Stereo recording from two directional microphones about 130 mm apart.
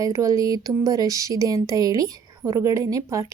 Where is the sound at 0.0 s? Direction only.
25° right (ahead or behind).